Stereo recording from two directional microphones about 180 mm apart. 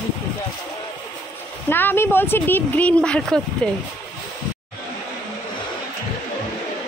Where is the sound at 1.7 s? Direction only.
10° left (ahead or behind).